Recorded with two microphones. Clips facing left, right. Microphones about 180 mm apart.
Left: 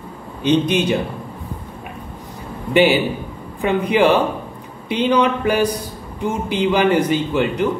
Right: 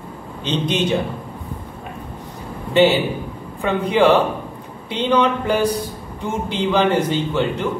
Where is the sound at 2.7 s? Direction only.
15° left (ahead or behind).